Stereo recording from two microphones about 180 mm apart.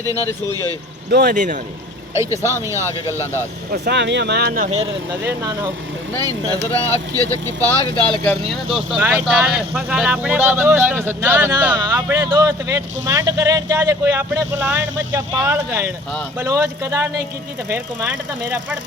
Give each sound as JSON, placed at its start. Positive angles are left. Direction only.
{"t": 0.0, "sound": "speech", "side_deg": -20}
{"t": 1.1, "sound": "speech", "side_deg": -55}
{"t": 2.5, "sound": "a man's voice", "side_deg": -15}
{"t": 3.7, "sound": "speech", "side_deg": -65}
{"t": 5.2, "sound": "a man's voice", "side_deg": -20}
{"t": 7.6, "sound": "speech", "side_deg": 10}
{"t": 8.3, "sound": "a man's voice", "side_deg": 0}